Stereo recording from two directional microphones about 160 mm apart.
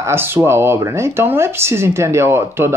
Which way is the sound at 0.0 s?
15° right (ahead or behind).